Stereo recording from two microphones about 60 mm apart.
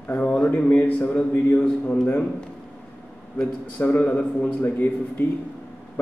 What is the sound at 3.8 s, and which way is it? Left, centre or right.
A man's voice, left.